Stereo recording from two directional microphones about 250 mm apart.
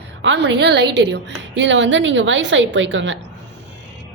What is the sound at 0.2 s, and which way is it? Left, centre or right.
A woman's voice, right.